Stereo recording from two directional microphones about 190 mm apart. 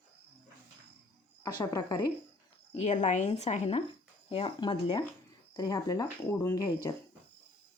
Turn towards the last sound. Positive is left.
turn(degrees=20)  # may be behind; listen again after turning